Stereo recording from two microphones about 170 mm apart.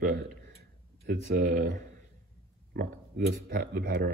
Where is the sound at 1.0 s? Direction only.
60° right (ahead or behind).